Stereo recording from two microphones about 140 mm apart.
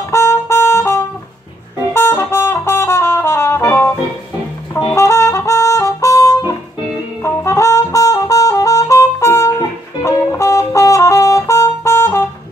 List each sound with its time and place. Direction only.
0.1 s trumpet: 20° left (ahead or behind)
2.0 s brass instrument: 15° left (ahead or behind)
4.9 s music: 20° left (ahead or behind)
7.2 s brass instrument: 20° left (ahead or behind)